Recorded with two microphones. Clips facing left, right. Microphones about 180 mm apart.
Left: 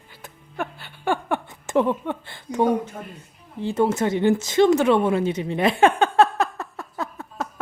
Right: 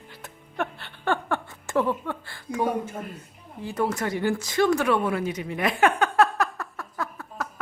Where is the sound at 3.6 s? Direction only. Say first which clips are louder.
Left 6 dB; 25° left (ahead or behind).